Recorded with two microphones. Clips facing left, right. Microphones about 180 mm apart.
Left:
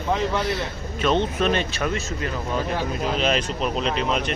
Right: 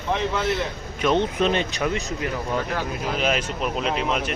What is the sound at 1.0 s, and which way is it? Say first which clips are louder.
Speech: right 1 dB; 15° right (ahead or behind).